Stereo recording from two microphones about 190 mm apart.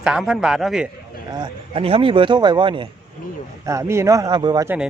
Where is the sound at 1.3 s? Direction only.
25° right (ahead or behind).